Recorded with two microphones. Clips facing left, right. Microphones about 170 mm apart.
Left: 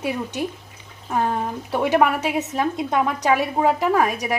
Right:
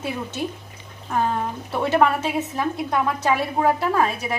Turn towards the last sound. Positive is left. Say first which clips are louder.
# left 2 dB
turn(degrees=15)  # may be behind; listen again after turning